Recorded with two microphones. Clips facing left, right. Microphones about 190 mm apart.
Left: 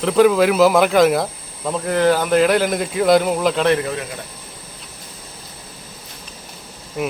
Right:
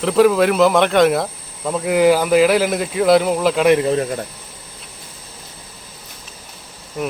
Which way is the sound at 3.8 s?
30° right (ahead or behind).